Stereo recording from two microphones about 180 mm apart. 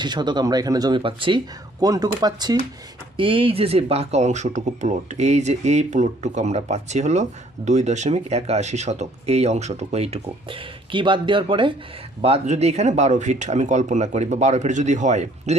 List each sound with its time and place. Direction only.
0.0 s speech: 25° right (ahead or behind); by 15.5 s 40° right (ahead or behind)